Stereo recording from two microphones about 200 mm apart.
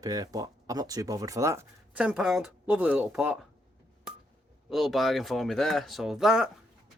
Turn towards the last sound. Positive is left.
turn(degrees=-5)  # may be behind; listen again after turning